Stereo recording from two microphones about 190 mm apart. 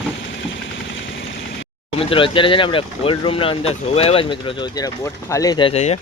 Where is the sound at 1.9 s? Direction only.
30° left (ahead or behind).